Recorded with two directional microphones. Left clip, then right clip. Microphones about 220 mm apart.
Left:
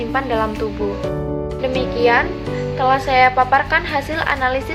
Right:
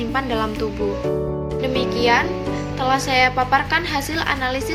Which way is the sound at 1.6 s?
40° right (ahead or behind).